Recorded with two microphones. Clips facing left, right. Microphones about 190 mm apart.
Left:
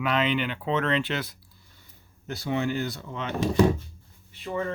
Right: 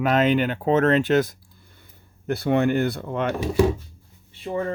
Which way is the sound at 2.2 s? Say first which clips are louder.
Right 7 dB; 55° right (ahead or behind).